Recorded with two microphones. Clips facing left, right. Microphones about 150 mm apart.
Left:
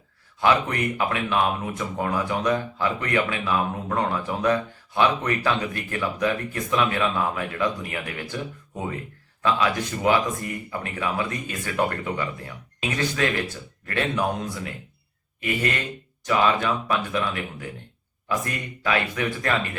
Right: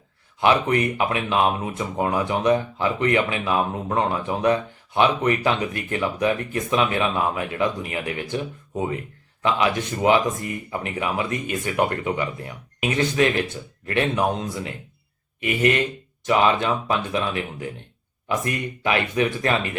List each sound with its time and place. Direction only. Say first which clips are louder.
0.3 s speech: right 3 dB; 20° right (ahead or behind)